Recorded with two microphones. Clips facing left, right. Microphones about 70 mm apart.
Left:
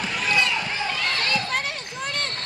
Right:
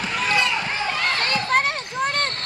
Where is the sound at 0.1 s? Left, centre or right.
Right.